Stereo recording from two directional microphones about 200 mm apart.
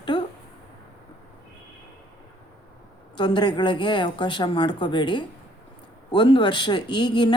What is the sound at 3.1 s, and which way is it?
A woman's voice, 20° left (ahead or behind).